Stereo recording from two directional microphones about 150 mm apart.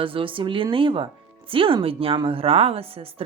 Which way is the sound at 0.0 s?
35° right (ahead or behind).